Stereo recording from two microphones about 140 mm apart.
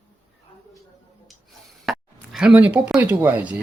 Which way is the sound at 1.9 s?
5° right (ahead or behind).